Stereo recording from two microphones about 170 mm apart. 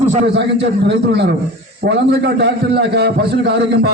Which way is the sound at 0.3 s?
85° right.